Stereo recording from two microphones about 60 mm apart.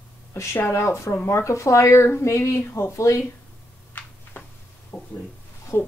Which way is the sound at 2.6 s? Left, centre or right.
Left.